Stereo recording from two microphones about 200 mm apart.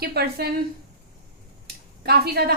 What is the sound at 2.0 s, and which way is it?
Speech, 50° right (ahead or behind).